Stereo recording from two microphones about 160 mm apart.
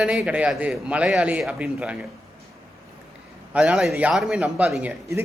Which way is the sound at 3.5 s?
5° right (ahead or behind).